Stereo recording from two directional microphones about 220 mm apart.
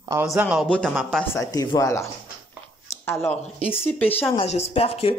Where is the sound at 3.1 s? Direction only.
10° left (ahead or behind).